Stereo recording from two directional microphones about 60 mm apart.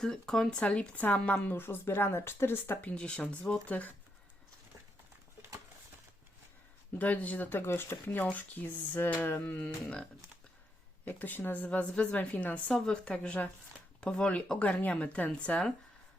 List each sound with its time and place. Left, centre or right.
0.0 s speech: centre
0.5 s a woman's voice: centre
1.5 s speech: left
2.8 s a woman's voice: centre
7.0 s speech: left
8.2 s a woman's voice: left
11.0 s a woman's voice: left
12.7 s a woman's voice: centre